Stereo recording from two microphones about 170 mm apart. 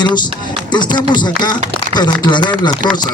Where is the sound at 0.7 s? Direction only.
25° left (ahead or behind).